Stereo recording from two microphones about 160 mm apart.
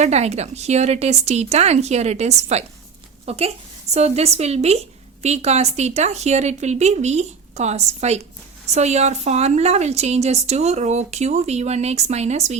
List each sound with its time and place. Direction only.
0.0 s a woman's voice: 45° right (ahead or behind)